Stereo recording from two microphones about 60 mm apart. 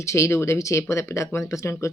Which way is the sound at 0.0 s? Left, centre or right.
Left.